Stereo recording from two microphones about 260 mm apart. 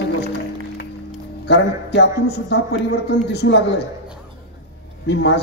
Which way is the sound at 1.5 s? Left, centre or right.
Left.